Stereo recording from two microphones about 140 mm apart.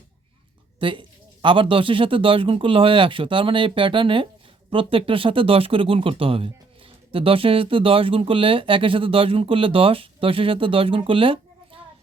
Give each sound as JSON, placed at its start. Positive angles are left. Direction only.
{"t": 0.8, "sound": "speech", "side_deg": -35}